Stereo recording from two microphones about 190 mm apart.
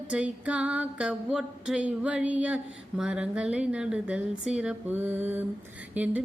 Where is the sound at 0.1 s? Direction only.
5° right (ahead or behind).